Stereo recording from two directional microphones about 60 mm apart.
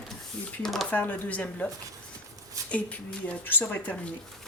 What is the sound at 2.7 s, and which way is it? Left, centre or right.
Speech, left.